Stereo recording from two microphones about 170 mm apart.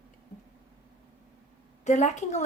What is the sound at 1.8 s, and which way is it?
Speech, 45° left (ahead or behind).